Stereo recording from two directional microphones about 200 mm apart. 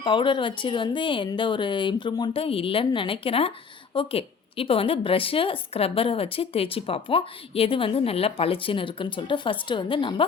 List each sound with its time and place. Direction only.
0.0 s a woman's voice: 25° left (ahead or behind)